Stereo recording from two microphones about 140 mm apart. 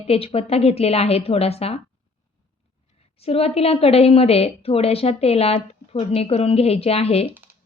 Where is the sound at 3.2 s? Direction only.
45° left (ahead or behind).